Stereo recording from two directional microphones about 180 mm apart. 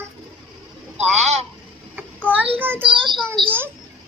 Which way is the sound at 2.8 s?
30° right (ahead or behind).